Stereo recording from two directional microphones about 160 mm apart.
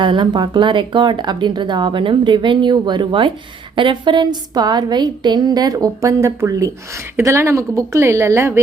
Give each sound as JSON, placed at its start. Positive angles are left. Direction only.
{"t": 0.0, "sound": "a woman's voice", "side_deg": -30}